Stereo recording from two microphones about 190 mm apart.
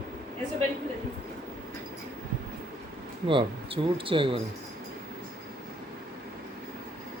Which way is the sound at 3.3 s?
25° right (ahead or behind).